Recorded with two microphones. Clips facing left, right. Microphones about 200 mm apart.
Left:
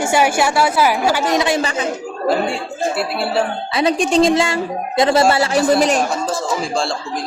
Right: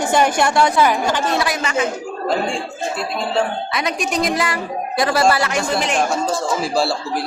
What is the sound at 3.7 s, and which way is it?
A woman's voice, 30° left (ahead or behind).